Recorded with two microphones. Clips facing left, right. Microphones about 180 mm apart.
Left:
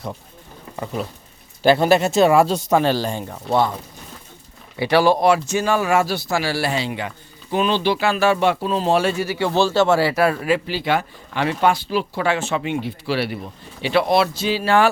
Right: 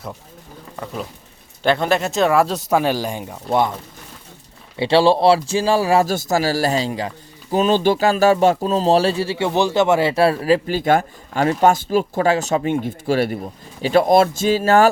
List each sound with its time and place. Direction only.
1.6 s speech: 5° left (ahead or behind); by 3.7 s 15° right (ahead or behind)
4.8 s speech: 25° right (ahead or behind); by 14.8 s 45° right (ahead or behind)